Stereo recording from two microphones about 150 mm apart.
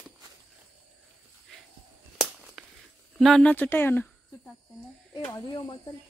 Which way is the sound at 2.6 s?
Centre (ahead or behind).